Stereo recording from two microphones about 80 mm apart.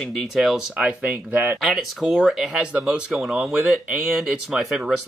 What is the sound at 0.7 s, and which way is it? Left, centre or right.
Speech, centre.